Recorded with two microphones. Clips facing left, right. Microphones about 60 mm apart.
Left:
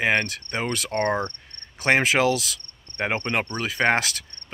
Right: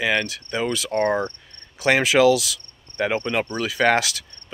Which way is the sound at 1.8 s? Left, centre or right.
Left.